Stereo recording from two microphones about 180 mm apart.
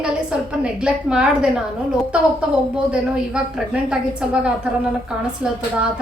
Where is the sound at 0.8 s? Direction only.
5° right (ahead or behind).